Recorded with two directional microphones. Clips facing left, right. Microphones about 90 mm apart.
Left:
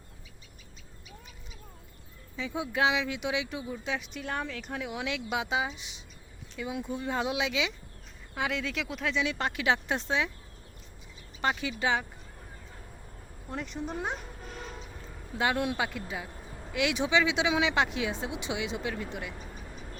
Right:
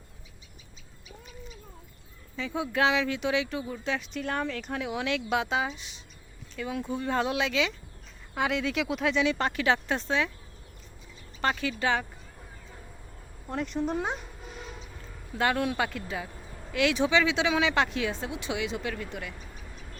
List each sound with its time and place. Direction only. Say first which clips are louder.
2.6 s speech: right 2 dB; 15° left (ahead or behind)
8.4 s speech: right 4 dB; centre (ahead or behind); by 10.3 s 15° left (ahead or behind)
11.3 s speech: right 2 dB; 15° left (ahead or behind)
13.6 s speech: right 7 dB; centre (ahead or behind)
14.0 s cat: right 2 dB; 5° right (ahead or behind)
14.9 s speech: right 3 dB; 15° left (ahead or behind)
16.4 s a sound: even; 5° left (ahead or behind)
16.7 s speech: right 2 dB; 15° left (ahead or behind)